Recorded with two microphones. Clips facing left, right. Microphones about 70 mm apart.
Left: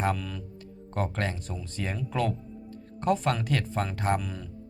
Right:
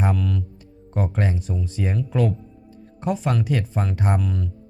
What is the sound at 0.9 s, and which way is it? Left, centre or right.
Speech, centre.